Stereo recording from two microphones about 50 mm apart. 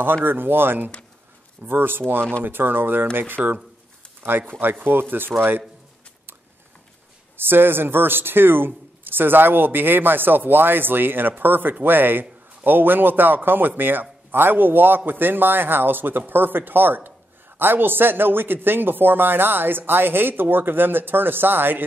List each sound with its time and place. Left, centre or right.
0.0 s speech: right
7.3 s speech: right